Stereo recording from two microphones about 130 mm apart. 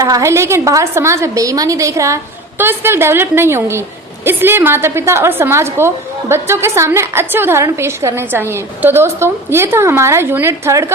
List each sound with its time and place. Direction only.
0.0 s a woman's voice: 25° right (ahead or behind)